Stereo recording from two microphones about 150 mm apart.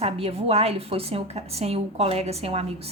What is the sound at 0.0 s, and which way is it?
A woman's voice, 40° right (ahead or behind).